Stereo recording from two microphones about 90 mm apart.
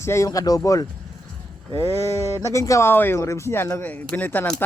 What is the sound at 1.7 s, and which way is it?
Speech, 25° left (ahead or behind).